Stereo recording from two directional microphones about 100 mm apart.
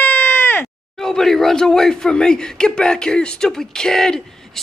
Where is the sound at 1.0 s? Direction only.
5° left (ahead or behind).